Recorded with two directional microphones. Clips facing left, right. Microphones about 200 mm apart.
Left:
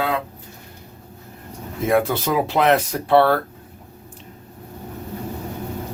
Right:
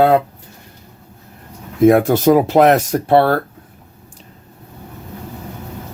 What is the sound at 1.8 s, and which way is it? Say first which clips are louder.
Speech: right 9 dB; 45° right (ahead or behind).